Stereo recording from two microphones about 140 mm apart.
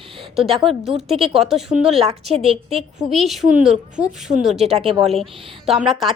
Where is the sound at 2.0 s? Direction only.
45° right (ahead or behind).